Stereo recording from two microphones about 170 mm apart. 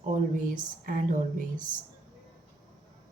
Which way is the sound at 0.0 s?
50° right (ahead or behind).